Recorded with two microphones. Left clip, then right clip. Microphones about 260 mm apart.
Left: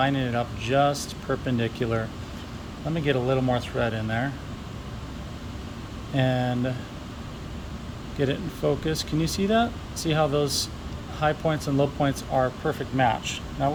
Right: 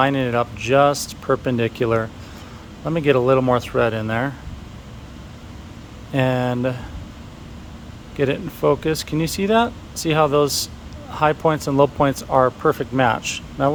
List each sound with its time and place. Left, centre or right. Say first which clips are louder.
0.0 s speech: right 7 dB; centre
6.1 s speech: right 6 dB; centre
8.2 s speech: right 7 dB; centre